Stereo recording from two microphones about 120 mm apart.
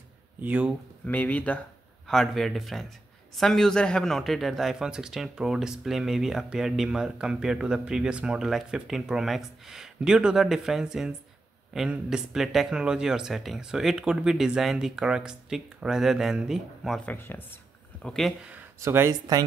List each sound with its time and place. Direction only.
0.4 s speech: 10° right (ahead or behind)
1.0 s speech: 15° left (ahead or behind)
17.0 s speech: 15° left (ahead or behind)
18.0 s speech: 5° left (ahead or behind)
18.8 s speech: 20° right (ahead or behind)